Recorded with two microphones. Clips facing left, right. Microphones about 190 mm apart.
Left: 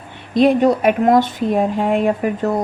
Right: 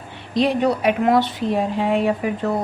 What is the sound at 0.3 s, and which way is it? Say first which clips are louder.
A woman's voice: left 5 dB; 50° left (ahead or behind).